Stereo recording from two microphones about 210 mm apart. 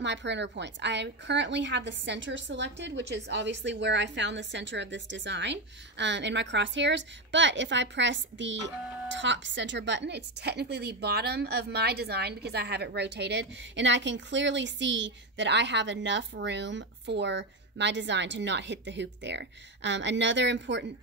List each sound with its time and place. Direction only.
0.0 s a woman's voice: 55° right (ahead or behind)